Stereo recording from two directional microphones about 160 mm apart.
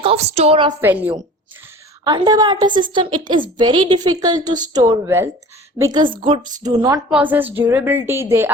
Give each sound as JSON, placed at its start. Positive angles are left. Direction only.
{"t": 0.0, "sound": "a woman's voice", "side_deg": -40}
{"t": 0.8, "sound": "a woman's voice", "side_deg": -10}
{"t": 2.0, "sound": "a woman's voice", "side_deg": -25}
{"t": 5.0, "sound": "a woman's voice", "side_deg": -15}
{"t": 5.8, "sound": "a woman's voice", "side_deg": -30}
{"t": 7.1, "sound": "a woman's voice", "side_deg": -10}